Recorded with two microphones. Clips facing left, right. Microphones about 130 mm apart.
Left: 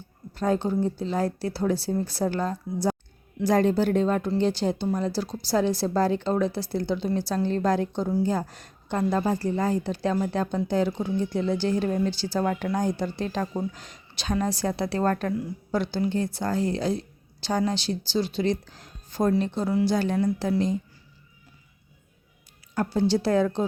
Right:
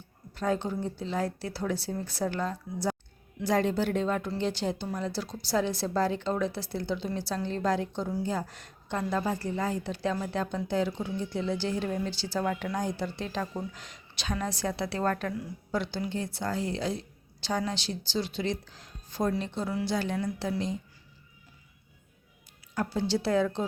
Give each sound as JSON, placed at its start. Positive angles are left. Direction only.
{"t": 0.3, "sound": "a woman's voice", "side_deg": 35}
{"t": 22.7, "sound": "speech", "side_deg": 45}